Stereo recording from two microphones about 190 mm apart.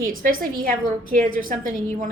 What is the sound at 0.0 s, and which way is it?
A woman's voice, 45° right (ahead or behind).